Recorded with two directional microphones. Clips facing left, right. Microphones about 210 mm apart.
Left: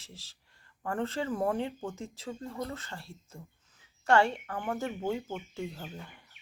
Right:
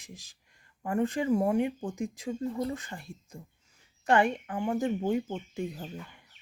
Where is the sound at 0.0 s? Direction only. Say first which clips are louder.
Right 4 dB; 15° right (ahead or behind).